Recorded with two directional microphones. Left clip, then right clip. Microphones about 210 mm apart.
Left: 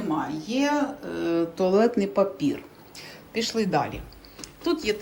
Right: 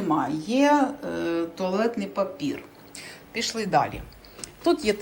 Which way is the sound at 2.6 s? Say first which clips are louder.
Right 1 dB; 15° left (ahead or behind).